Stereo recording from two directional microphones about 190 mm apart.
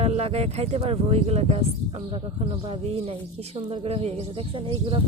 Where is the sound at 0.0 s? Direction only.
30° right (ahead or behind).